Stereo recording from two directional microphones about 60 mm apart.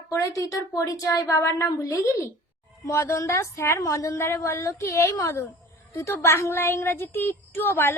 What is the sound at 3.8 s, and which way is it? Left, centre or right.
Speech, left.